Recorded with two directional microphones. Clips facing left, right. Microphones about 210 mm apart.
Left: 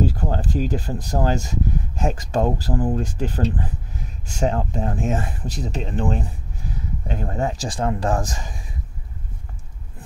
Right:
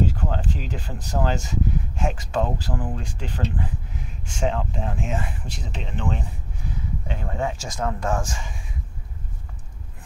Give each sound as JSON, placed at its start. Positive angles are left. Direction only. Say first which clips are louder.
{"t": 0.0, "sound": "speech", "louder": "left 2 dB", "side_deg": 35}